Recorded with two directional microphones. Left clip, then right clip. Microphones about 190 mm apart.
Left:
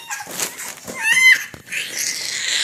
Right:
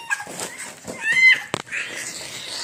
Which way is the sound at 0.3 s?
5° right (ahead or behind).